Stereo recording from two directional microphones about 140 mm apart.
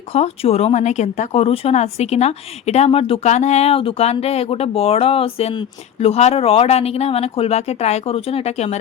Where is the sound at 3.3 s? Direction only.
55° left (ahead or behind).